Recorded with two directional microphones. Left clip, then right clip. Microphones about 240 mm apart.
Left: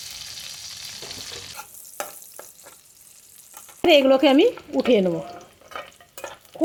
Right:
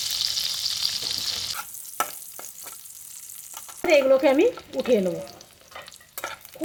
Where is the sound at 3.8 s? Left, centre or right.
Left.